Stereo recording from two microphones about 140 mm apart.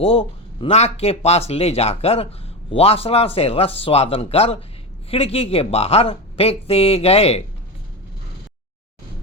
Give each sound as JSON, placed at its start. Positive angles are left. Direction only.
{"t": 0.0, "sound": "speech", "side_deg": 45}